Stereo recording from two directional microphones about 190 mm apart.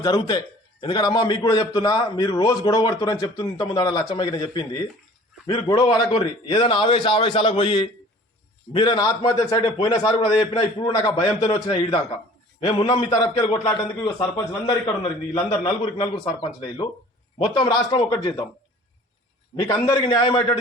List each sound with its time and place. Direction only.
0.0 s a man's voice: 20° left (ahead or behind)
17.3 s a man's voice: 25° left (ahead or behind)
19.6 s a man's voice: 20° left (ahead or behind)